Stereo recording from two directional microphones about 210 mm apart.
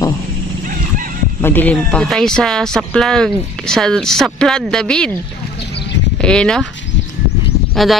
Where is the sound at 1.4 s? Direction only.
10° left (ahead or behind).